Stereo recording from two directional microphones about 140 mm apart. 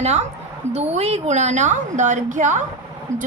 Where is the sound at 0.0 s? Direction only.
50° right (ahead or behind).